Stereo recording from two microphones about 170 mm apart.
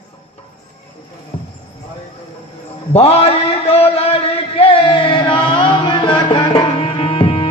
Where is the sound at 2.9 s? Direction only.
35° left (ahead or behind).